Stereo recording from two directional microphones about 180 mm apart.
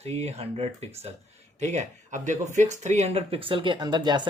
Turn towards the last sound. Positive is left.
turn(degrees=-25)  # may be behind; listen again after turning